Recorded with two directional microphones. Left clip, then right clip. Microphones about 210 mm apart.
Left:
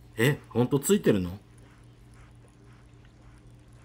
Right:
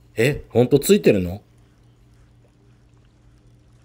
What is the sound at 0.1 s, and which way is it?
Speech, 15° right (ahead or behind).